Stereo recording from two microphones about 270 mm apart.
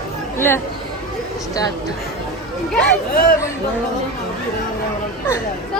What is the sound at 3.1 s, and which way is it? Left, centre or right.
Speech, left.